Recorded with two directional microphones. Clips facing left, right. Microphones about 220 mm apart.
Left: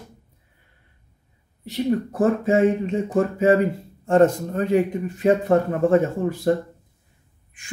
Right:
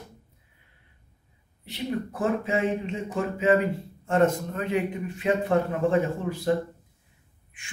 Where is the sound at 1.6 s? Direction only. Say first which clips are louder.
Left 8 dB; 40° left (ahead or behind).